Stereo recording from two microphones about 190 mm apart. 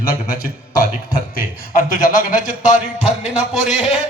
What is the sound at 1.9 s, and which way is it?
Speech, 45° left (ahead or behind).